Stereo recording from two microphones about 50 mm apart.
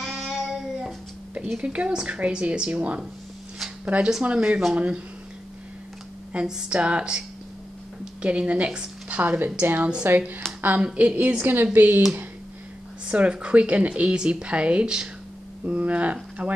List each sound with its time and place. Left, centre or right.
0.0 s a sound: centre
1.6 s a woman's voice: right
4.4 s speech: centre
4.7 s a woman's voice: right
6.3 s a woman's voice: centre
8.0 s a sound: right
9.8 s a woman's voice: right
10.0 s a woman's voice: right
11.4 s speech: right
13.0 s a woman's voice: right
15.6 s speech: right